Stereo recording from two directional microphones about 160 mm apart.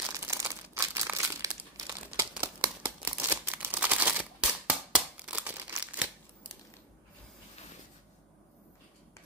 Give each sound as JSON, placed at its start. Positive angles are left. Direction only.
{"t": 0.1, "sound": "crumpling", "side_deg": -15}